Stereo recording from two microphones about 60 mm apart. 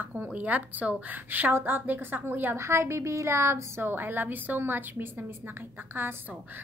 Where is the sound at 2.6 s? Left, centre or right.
Right.